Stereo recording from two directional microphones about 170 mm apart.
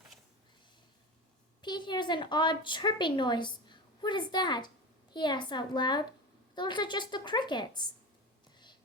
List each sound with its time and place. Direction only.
1.6 s a woman's voice: 25° left (ahead or behind)